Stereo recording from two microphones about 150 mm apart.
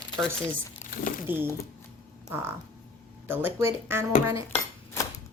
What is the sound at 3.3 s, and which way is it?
Speech, 15° right (ahead or behind).